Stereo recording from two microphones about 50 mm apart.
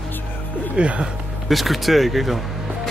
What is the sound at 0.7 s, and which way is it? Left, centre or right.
Speech, right.